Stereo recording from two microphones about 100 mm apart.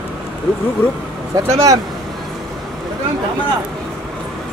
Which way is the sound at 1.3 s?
35° right (ahead or behind).